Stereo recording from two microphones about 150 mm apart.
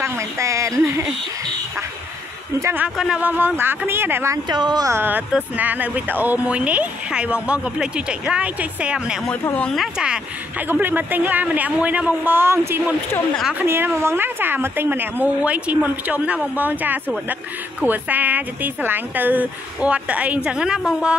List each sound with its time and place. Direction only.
0.0 s speech: 20° right (ahead or behind)
2.6 s a woman's voice: 10° right (ahead or behind)
4.5 s a woman's voice: 30° right (ahead or behind); by 9.2 s 5° right (ahead or behind)
9.3 s speech: 10° left (ahead or behind)
9.9 s a woman's voice: 5° right (ahead or behind)
13.4 s speech: 5° right (ahead or behind)
13.7 s a woman's voice: 15° right (ahead or behind)